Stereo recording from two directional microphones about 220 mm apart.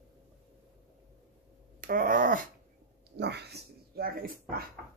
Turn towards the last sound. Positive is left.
turn(degrees=-40)  # may be behind; listen again after turning